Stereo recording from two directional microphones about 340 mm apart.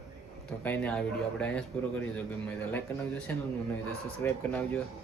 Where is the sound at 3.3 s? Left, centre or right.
Centre.